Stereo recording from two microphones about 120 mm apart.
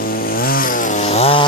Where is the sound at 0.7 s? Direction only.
90° left; by 1.5 s 55° left (ahead or behind).